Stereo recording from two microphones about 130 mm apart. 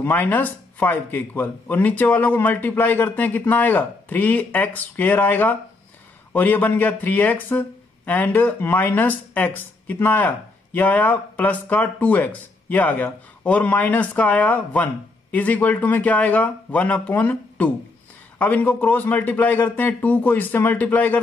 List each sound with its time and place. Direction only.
0.0 s speech: 15° left (ahead or behind)